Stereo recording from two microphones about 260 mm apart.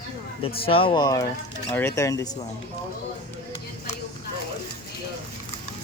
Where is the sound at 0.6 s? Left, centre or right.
Left.